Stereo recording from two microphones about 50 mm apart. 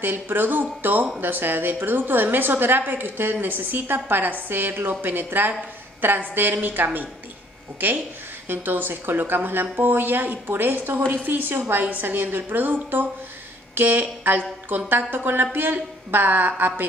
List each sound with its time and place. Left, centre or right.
0.0 s a woman's voice: right
8.5 s a woman's voice: right